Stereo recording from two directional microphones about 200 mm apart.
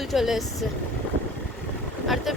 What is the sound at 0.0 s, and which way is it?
Speech, centre (ahead or behind).